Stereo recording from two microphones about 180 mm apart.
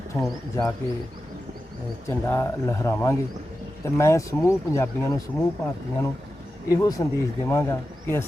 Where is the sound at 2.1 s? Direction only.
10° left (ahead or behind).